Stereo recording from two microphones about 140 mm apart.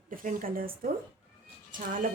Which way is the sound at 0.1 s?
80° right.